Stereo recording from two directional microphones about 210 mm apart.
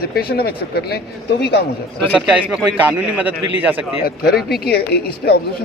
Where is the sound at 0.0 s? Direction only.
45° left (ahead or behind).